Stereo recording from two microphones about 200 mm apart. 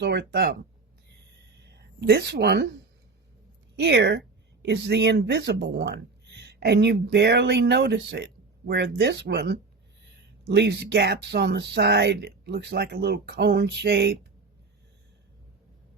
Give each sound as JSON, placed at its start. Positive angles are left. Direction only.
{"t": 0.0, "sound": "speech", "side_deg": -55}
{"t": 1.6, "sound": "speech", "side_deg": -55}
{"t": 3.8, "sound": "speech", "side_deg": -55}